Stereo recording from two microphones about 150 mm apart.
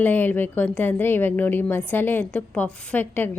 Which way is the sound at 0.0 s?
10° left (ahead or behind).